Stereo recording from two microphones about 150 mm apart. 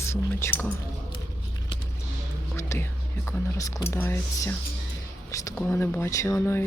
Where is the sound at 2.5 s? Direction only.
15° left (ahead or behind).